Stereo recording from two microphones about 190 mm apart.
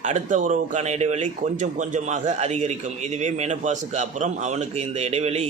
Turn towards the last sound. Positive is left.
turn(degrees=-35)  # may be behind; listen again after turning